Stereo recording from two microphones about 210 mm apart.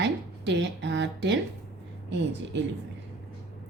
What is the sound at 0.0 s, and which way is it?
Speech, 55° right (ahead or behind).